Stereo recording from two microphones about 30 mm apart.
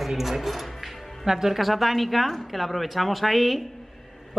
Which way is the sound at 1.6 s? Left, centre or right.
Centre.